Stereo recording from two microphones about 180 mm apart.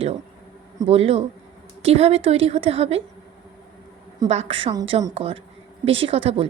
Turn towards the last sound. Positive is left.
turn(degrees=-35)  # may be behind; listen again after turning